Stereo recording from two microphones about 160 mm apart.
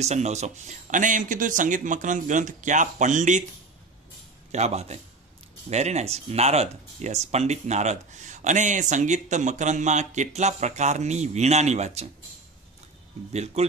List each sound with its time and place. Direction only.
0.0 s speech: 45° right (ahead or behind)
4.5 s speech: 45° right (ahead or behind)
13.3 s speech: 45° right (ahead or behind)